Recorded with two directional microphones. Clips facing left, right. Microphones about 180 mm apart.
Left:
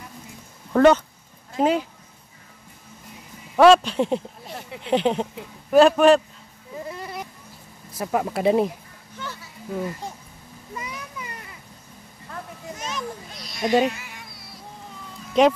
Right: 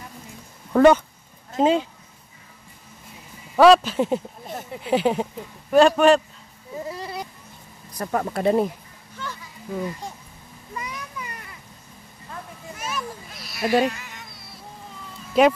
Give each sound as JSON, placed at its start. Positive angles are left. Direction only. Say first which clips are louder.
{"t": 0.7, "sound": "speech", "louder": "right 1 dB", "side_deg": -10}
{"t": 1.6, "sound": "speech", "louder": "right 2 dB", "side_deg": -25}
{"t": 3.5, "sound": "speech", "louder": "even", "side_deg": 0}
{"t": 4.5, "sound": "a sound", "louder": "right 4 dB", "side_deg": -45}
{"t": 4.8, "sound": "speech", "louder": "even", "side_deg": -5}
{"t": 6.9, "sound": "a sound", "louder": "right 1 dB", "side_deg": -30}
{"t": 7.9, "sound": "speech", "louder": "left 1 dB", "side_deg": 5}
{"t": 12.8, "sound": "children playing", "louder": "right 1 dB", "side_deg": -5}
{"t": 13.7, "sound": "speech", "louder": "left 1 dB", "side_deg": 15}
{"t": 15.3, "sound": "speech", "louder": "even", "side_deg": -5}